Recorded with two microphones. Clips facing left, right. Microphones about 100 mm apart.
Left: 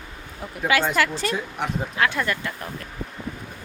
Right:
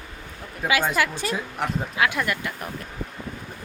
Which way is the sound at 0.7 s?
10° right (ahead or behind).